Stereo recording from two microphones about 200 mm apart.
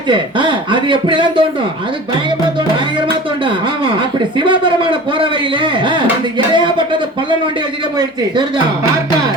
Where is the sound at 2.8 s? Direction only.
25° right (ahead or behind).